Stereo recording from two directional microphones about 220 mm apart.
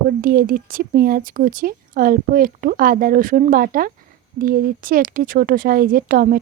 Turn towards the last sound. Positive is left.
turn(degrees=-40)  # may be behind; listen again after turning